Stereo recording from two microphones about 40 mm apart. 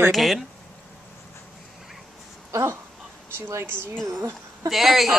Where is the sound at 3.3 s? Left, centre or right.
Right.